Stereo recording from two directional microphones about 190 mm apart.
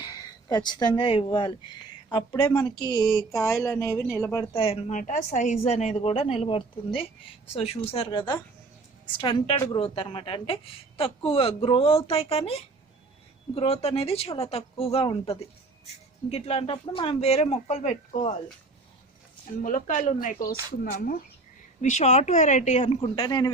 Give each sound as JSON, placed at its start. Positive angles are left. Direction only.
{"t": 0.0, "sound": "a woman's voice", "side_deg": 20}
{"t": 4.5, "sound": "a woman's voice", "side_deg": 30}
{"t": 13.6, "sound": "a woman's voice", "side_deg": 30}
{"t": 19.6, "sound": "a woman's voice", "side_deg": 45}